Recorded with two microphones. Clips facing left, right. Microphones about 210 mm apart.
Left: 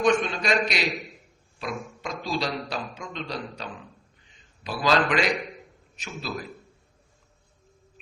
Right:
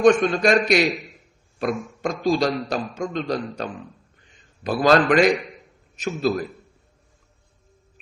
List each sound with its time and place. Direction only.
0.0 s a man's voice: 50° right (ahead or behind)
1.5 s a sound: 50° right (ahead or behind)
2.2 s a man's voice: 45° right (ahead or behind)